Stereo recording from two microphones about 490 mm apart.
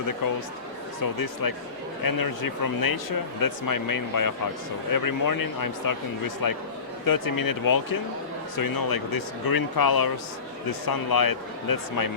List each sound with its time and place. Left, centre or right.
1.2 s speech: left